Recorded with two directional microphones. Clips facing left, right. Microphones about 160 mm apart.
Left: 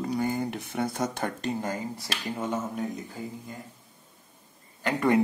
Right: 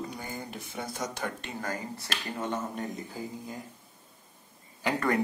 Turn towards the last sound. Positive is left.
turn(degrees=0)  # may be behind; listen again after turning